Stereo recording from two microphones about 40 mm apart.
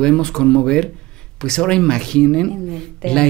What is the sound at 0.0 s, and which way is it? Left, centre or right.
A woman's voice, centre.